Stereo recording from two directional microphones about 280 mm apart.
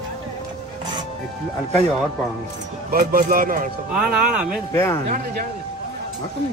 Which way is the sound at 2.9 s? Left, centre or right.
Right.